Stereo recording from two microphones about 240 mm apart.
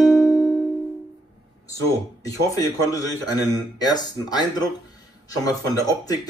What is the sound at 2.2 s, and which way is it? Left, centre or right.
A man's voice, centre.